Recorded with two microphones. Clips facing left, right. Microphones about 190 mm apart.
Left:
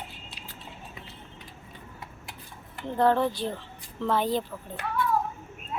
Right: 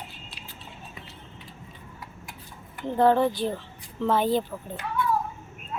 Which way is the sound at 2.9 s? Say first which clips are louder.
Right 3 dB; 5° right (ahead or behind).